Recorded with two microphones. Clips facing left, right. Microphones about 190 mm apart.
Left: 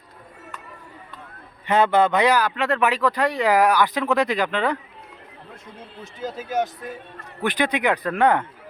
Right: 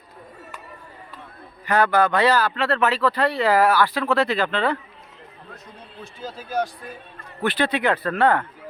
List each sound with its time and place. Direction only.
1.6 s speech: 25° left (ahead or behind)
6.0 s speech: 20° left (ahead or behind)